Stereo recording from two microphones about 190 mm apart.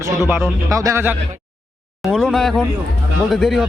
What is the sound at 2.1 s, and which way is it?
Speech, 5° left (ahead or behind).